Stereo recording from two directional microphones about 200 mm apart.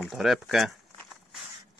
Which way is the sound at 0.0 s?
Centre (ahead or behind).